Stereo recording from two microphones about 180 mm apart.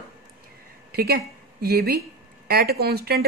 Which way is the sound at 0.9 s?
60° right (ahead or behind).